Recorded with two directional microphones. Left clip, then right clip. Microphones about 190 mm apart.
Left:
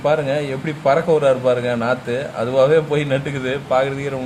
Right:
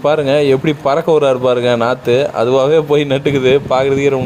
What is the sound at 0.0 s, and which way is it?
A man's voice, 35° right (ahead or behind).